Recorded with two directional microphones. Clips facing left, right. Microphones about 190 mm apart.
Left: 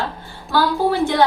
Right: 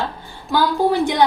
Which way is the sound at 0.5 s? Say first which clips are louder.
Right 1 dB; 15° right (ahead or behind).